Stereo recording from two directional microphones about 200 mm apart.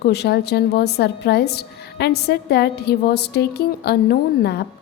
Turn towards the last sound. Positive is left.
turn(degrees=55)  # may be behind; listen again after turning